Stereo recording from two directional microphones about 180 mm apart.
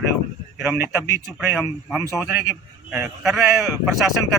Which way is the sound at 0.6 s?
10° right (ahead or behind).